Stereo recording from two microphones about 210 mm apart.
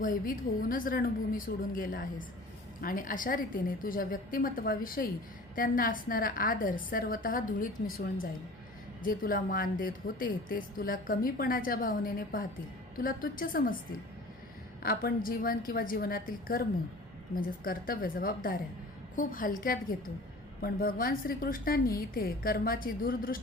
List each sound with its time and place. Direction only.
0.0 s a woman's voice: 40° left (ahead or behind)
14.8 s a woman's voice: 45° left (ahead or behind)